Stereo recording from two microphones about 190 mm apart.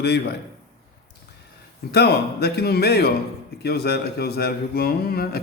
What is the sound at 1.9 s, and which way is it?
Speech, 55° left (ahead or behind).